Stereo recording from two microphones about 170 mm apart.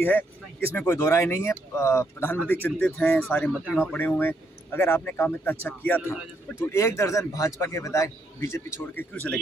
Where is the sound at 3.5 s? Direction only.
5° right (ahead or behind).